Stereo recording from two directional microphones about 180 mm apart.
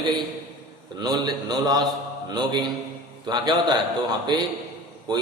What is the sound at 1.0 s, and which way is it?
A man's voice, 20° right (ahead or behind).